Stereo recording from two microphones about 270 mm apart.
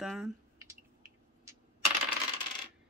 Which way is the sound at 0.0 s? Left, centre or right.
Centre.